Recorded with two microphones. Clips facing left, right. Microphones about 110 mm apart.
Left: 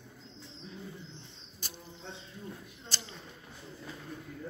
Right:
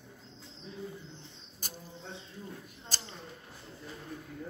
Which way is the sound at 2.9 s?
40° right (ahead or behind).